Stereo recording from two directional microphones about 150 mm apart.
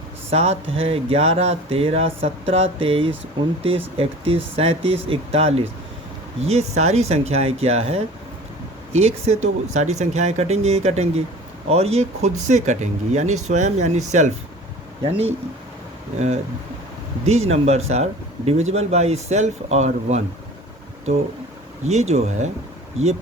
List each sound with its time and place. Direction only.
0.3 s speech: 45° right (ahead or behind)
16.1 s speech: 50° right (ahead or behind)
21.8 s speech: 45° right (ahead or behind)